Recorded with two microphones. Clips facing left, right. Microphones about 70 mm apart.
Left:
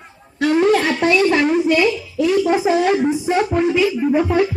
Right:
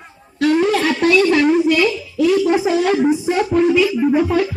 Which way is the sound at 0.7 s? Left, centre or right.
Left.